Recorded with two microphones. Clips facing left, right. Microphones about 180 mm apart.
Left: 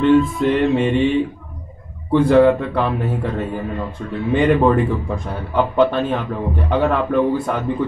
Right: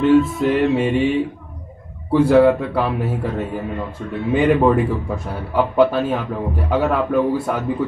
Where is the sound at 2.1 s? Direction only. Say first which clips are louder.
Even; 5° right (ahead or behind).